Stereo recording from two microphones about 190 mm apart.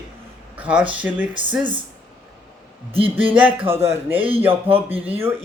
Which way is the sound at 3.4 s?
10° right (ahead or behind).